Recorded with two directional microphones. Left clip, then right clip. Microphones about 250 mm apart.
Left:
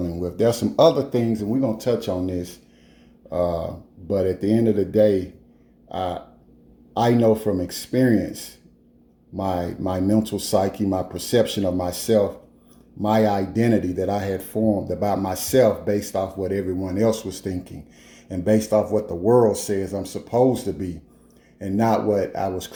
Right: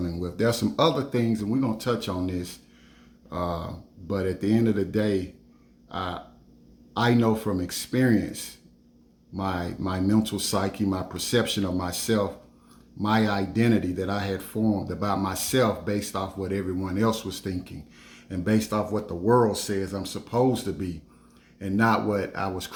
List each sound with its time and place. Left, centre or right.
0.3 s speech: right
1.3 s speech: centre
3.4 s speech: right
4.0 s speech: centre
9.4 s speech: centre
17.0 s speech: right
17.2 s speech: centre